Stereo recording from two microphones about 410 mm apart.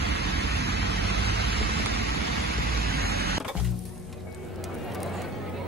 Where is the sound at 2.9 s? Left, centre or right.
Right.